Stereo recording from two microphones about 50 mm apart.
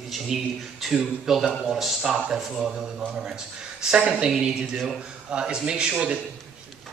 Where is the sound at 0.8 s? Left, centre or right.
Centre.